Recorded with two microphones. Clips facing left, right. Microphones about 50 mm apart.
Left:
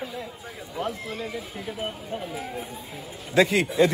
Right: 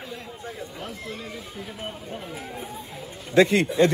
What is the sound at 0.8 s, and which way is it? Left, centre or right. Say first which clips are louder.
Speech: left 9 dB; centre.